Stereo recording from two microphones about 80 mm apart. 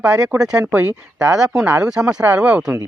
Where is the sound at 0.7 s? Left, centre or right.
Right.